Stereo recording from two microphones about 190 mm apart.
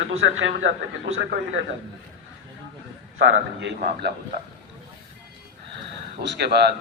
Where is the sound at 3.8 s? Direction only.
50° right (ahead or behind).